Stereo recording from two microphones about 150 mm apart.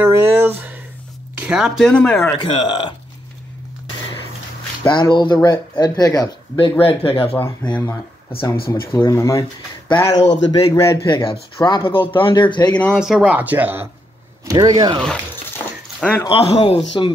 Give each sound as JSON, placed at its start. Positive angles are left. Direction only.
{"t": 0.0, "sound": "speech", "side_deg": -15}
{"t": 1.9, "sound": "speech", "side_deg": 10}
{"t": 2.3, "sound": "speech", "side_deg": 35}
{"t": 4.8, "sound": "speech", "side_deg": 30}
{"t": 6.8, "sound": "speech", "side_deg": 40}
{"t": 8.5, "sound": "speech", "side_deg": 85}
{"t": 8.9, "sound": "speech", "side_deg": 20}
{"t": 11.5, "sound": "speech", "side_deg": 35}
{"t": 12.9, "sound": "speech", "side_deg": -5}
{"t": 14.4, "sound": "speech", "side_deg": -25}
{"t": 15.5, "sound": "a sound", "side_deg": 10}
{"t": 16.3, "sound": "speech", "side_deg": 40}